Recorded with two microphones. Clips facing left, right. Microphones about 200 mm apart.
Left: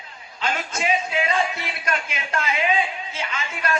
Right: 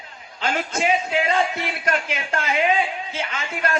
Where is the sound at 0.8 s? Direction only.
55° right (ahead or behind).